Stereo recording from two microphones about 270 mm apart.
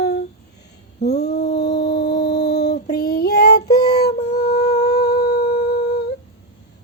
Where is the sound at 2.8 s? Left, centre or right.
Left.